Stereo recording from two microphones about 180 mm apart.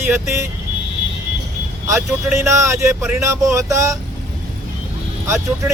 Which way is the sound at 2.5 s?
15° right (ahead or behind).